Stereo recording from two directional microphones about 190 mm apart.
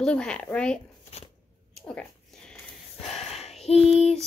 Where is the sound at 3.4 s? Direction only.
35° left (ahead or behind).